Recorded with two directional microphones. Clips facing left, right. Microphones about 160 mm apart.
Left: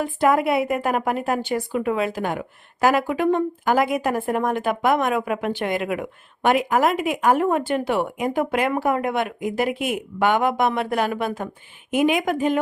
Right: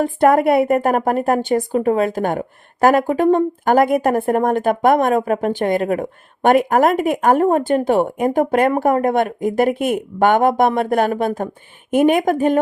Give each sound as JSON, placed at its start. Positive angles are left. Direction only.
{"t": 0.0, "sound": "a woman's voice", "side_deg": -50}